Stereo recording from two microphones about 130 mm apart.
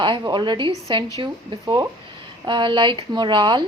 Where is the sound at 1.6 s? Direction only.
20° right (ahead or behind).